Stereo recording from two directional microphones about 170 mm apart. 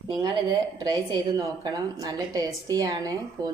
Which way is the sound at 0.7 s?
25° right (ahead or behind).